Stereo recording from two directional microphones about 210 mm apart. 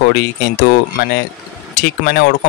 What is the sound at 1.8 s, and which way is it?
Speech, 50° left (ahead or behind).